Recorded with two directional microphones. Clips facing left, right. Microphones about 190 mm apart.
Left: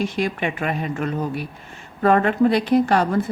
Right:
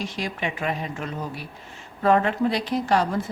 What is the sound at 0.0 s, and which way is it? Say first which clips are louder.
A woman's voice: left 6 dB; 55° left (ahead or behind).